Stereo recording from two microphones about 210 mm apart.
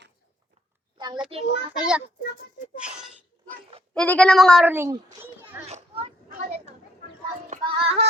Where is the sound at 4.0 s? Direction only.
5° left (ahead or behind).